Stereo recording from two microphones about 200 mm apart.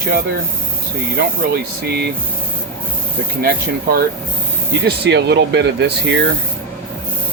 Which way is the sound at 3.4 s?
50° right (ahead or behind).